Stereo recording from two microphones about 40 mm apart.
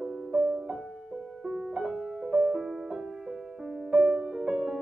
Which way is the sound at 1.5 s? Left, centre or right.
Centre.